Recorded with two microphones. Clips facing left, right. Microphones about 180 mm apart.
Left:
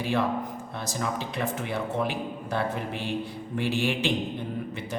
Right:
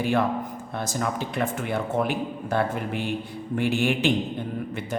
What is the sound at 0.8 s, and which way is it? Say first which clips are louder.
A man's voice: right 3 dB; 50° right (ahead or behind).